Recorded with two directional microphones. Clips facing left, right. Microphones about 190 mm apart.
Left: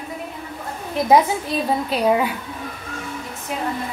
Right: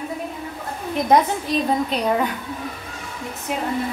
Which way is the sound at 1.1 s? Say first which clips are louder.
Left 1 dB; 5° left (ahead or behind).